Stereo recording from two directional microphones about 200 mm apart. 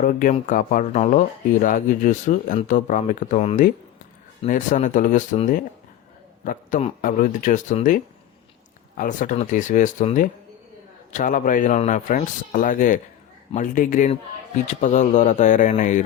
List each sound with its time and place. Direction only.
0.0 s speech: 45° left (ahead or behind)